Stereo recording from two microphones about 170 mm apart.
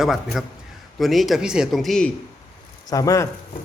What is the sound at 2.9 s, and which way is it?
Speech, 20° left (ahead or behind).